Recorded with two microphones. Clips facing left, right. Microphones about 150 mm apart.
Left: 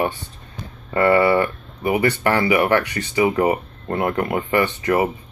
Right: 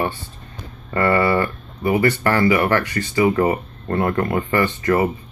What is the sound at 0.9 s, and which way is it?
Speech, 20° left (ahead or behind).